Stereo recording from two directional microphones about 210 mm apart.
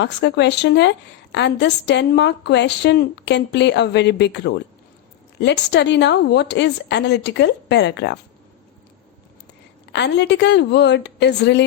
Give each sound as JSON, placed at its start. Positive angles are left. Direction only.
{"t": 0.0, "sound": "a woman's voice", "side_deg": 55}
{"t": 9.9, "sound": "a woman's voice", "side_deg": 55}